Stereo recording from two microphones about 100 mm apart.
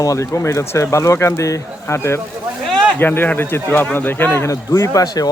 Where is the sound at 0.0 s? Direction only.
35° left (ahead or behind).